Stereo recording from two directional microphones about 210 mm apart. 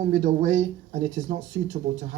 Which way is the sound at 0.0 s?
35° right (ahead or behind).